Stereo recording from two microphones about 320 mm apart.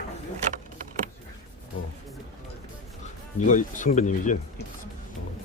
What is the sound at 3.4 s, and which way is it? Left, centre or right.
Speech, left.